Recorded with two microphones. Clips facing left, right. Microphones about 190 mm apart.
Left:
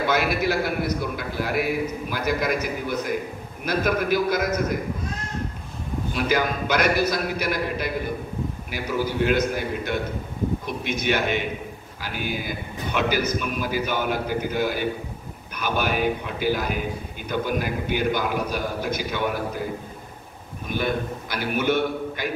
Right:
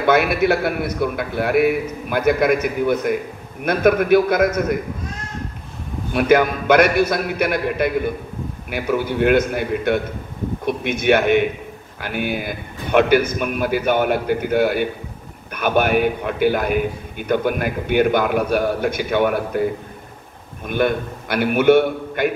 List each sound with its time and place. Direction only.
0.0 s speech: 55° right (ahead or behind)
6.1 s speech: 55° right (ahead or behind)